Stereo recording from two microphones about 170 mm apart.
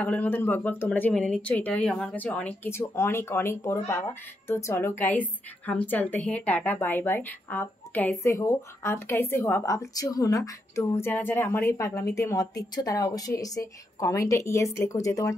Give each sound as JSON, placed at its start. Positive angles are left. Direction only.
{"t": 0.0, "sound": "a woman's voice", "side_deg": 10}